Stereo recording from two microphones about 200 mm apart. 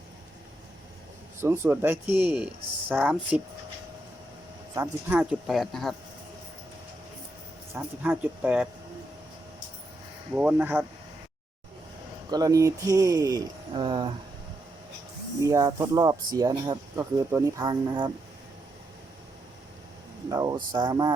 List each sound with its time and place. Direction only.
1.4 s speech: 10° right (ahead or behind)
4.7 s speech: 10° right (ahead or behind)
7.8 s speech: 10° right (ahead or behind)
10.3 s speech: 5° right (ahead or behind)
12.3 s speech: 20° right (ahead or behind)
15.4 s speech: 15° right (ahead or behind)
20.3 s speech: 20° right (ahead or behind)